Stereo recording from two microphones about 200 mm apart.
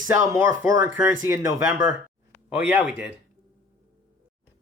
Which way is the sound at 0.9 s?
15° right (ahead or behind).